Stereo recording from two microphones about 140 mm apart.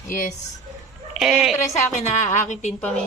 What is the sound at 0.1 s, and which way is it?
Speech, 85° left.